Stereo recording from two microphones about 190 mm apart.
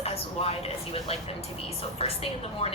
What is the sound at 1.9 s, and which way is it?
Speech, 30° left (ahead or behind).